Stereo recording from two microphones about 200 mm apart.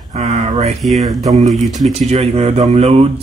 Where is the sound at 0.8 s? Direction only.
Centre (ahead or behind).